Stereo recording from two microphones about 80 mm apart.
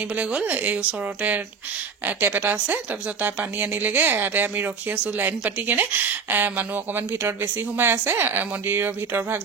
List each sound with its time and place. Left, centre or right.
0.1 s speech: centre
2.0 s a woman's voice: right